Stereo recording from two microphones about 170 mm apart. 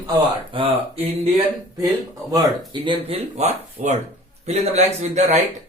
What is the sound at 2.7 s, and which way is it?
Speech, 30° right (ahead or behind).